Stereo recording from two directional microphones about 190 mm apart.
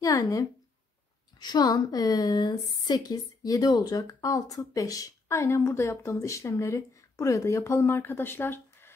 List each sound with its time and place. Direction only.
0.0 s speech: 15° left (ahead or behind)